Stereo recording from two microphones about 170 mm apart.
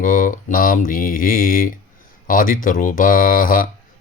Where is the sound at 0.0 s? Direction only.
50° left (ahead or behind).